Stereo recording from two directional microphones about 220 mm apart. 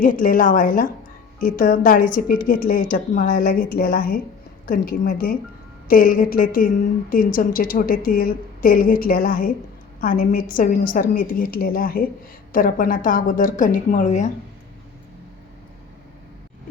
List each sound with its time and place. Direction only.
0.0 s a woman's voice: 40° left (ahead or behind)